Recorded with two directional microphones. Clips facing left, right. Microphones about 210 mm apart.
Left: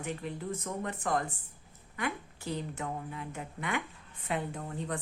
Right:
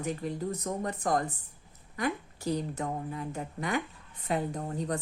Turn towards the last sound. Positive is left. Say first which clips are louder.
# right 4 dB
turn(degrees=-40)  # may be behind; listen again after turning